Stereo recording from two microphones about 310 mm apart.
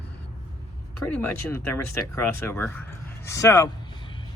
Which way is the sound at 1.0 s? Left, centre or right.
Centre.